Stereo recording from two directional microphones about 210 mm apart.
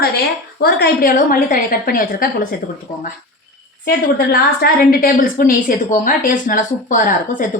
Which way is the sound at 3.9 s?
45° left (ahead or behind).